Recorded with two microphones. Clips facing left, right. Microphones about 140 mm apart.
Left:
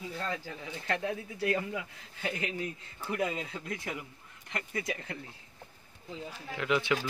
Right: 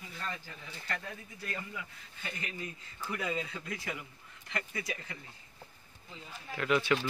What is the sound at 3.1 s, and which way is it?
Speech, 50° left (ahead or behind).